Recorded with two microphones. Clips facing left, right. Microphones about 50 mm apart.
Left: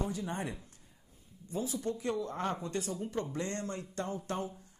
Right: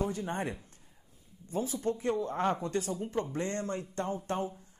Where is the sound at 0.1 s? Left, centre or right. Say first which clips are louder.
Right 3 dB; right.